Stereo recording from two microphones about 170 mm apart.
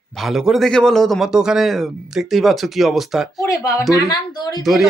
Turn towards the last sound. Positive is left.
turn(degrees=0)  # may be behind; listen again after turning